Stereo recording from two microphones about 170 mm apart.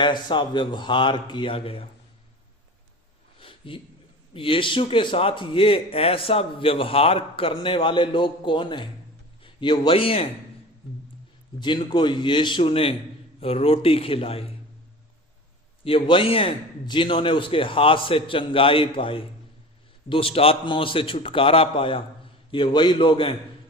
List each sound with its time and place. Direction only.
0.0 s a man's voice: 30° left (ahead or behind)
3.3 s a sound: 30° left (ahead or behind)
4.4 s a man's voice: 30° left (ahead or behind)
11.6 s a man's voice: 25° left (ahead or behind)
15.8 s a man's voice: 35° left (ahead or behind)